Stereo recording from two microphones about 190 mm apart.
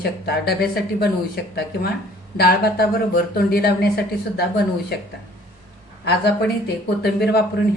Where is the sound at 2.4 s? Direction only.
55° left (ahead or behind).